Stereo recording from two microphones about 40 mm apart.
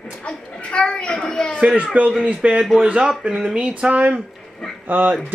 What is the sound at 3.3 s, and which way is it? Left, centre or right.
Speech, centre.